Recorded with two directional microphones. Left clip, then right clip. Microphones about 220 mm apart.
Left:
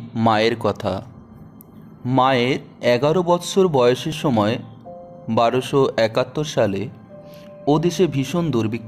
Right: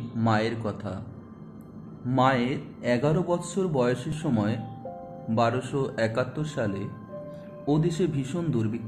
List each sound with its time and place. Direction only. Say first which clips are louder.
0.2 s speech: left 9 dB; 45° left (ahead or behind)
2.0 s speech: left 7 dB; 45° left (ahead or behind)